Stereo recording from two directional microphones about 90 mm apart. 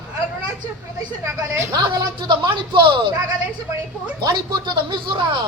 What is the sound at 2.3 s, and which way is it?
Speech, 65° right (ahead or behind).